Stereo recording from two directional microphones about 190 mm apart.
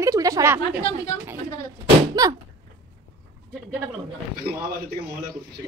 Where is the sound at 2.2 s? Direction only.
20° right (ahead or behind).